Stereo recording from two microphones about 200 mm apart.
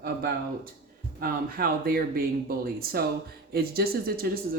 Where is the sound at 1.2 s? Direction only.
50° right (ahead or behind).